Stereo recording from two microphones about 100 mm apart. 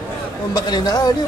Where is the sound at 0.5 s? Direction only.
45° left (ahead or behind).